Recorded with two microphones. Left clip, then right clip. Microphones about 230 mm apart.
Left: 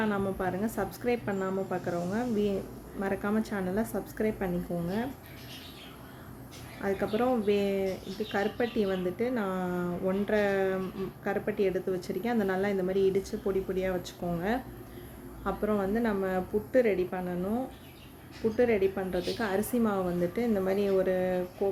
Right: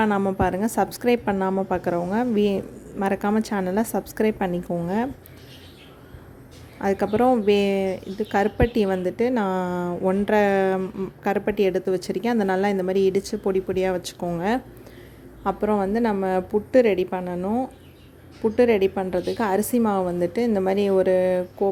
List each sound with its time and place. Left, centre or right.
0.0 s speech: right
6.8 s speech: right
18.5 s speech: right